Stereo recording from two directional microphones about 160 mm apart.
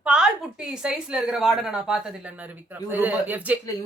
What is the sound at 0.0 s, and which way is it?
A woman's voice, 5° right (ahead or behind).